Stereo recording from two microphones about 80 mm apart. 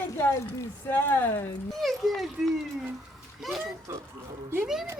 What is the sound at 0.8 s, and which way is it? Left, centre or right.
Speech, left.